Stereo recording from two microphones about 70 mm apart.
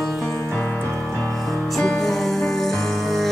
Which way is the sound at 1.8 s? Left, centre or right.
Centre.